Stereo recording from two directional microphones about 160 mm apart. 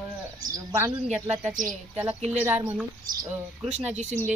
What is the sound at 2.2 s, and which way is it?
Speech, 10° right (ahead or behind).